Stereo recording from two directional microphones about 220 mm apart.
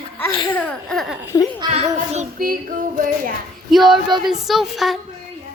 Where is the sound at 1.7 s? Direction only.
30° right (ahead or behind).